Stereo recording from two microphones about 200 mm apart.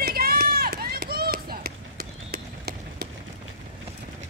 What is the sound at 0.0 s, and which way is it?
Run, 50° right (ahead or behind).